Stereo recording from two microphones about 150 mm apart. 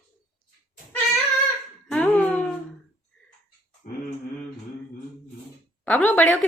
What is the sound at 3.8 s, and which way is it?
Mantra, 70° left (ahead or behind).